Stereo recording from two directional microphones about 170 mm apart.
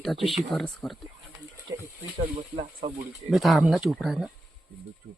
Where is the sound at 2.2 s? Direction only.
35° right (ahead or behind).